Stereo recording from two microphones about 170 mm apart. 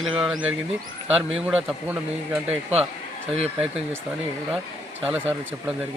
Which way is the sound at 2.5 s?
40° right (ahead or behind).